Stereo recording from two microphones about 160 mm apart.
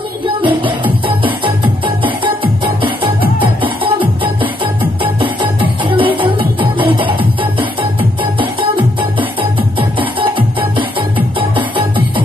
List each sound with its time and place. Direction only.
0.4 s music: 30° right (ahead or behind)